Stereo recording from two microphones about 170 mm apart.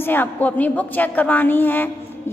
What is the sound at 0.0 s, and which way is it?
A woman's voice, 10° left (ahead or behind).